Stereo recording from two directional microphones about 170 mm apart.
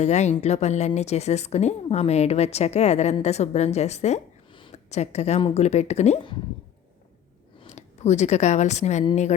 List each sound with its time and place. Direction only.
0.0 s speech: 40° left (ahead or behind)
7.6 s speech: 40° left (ahead or behind)